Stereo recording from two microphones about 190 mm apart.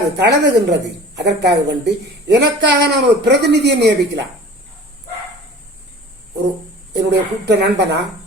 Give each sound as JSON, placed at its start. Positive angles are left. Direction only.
{"t": 0.2, "sound": "a woman's voice", "side_deg": -65}
{"t": 6.9, "sound": "a woman's voice", "side_deg": -60}